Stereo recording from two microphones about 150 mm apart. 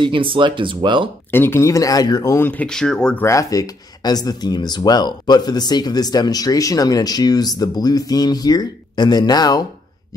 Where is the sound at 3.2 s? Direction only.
25° left (ahead or behind).